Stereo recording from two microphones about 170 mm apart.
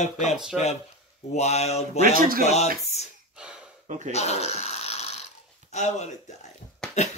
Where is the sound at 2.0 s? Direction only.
55° right (ahead or behind).